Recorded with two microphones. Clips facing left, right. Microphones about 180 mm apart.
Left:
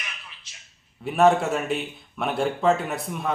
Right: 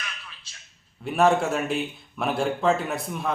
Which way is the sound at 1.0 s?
Centre (ahead or behind).